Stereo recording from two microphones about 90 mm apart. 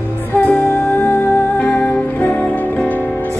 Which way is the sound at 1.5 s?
15° left (ahead or behind).